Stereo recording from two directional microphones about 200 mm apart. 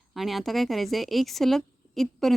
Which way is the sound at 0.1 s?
Centre (ahead or behind).